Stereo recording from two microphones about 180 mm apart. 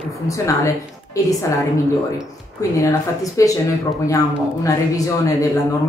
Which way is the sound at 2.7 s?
20° left (ahead or behind).